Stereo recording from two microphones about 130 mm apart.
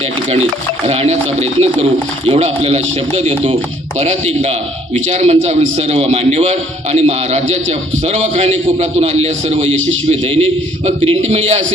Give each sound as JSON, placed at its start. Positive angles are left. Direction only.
{"t": 0.9, "sound": "a man's voice", "side_deg": -55}